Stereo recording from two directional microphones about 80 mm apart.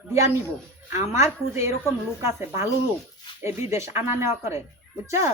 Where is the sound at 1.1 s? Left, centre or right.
Right.